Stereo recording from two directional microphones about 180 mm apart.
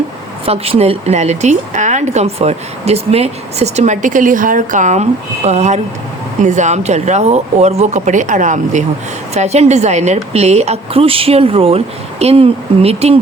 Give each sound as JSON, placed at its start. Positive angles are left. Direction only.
{"t": 0.4, "sound": "a woman's voice", "side_deg": -35}